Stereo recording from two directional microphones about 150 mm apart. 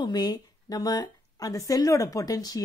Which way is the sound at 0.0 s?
30° left (ahead or behind).